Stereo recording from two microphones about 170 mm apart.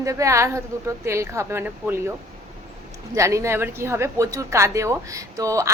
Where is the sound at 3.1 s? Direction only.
15° right (ahead or behind).